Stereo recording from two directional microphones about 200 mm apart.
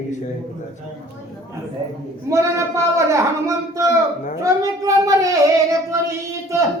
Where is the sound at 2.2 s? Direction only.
15° right (ahead or behind).